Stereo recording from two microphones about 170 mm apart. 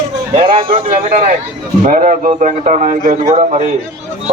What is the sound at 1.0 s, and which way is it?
Speech, 40° right (ahead or behind).